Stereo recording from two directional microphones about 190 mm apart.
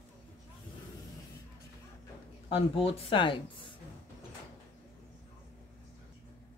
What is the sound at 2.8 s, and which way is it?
Speech, 30° left (ahead or behind).